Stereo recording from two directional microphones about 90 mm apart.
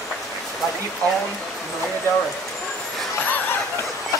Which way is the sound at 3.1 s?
20° left (ahead or behind).